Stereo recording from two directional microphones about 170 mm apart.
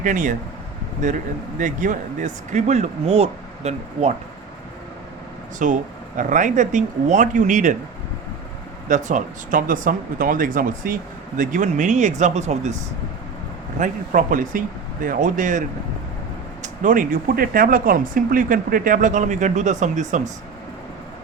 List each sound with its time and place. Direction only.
0.0 s speech: 50° right (ahead or behind)
1.5 s speech: 50° right (ahead or behind)
5.5 s speech: 50° right (ahead or behind)
8.9 s speech: 50° right (ahead or behind)
13.7 s speech: 50° right (ahead or behind)
16.8 s speech: 50° right (ahead or behind)